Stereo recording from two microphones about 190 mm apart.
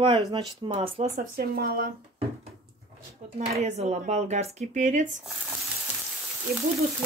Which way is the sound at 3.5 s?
35° right (ahead or behind).